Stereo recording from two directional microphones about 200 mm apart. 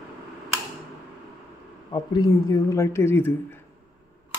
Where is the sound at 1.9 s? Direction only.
20° left (ahead or behind).